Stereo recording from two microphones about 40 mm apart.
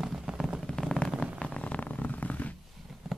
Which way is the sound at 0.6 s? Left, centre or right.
Centre.